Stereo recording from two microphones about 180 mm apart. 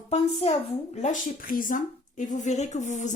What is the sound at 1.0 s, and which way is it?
A woman's voice, 45° left (ahead or behind).